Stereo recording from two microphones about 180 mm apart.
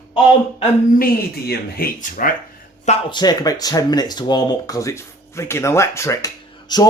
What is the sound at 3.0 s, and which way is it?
Speech, 25° left (ahead or behind).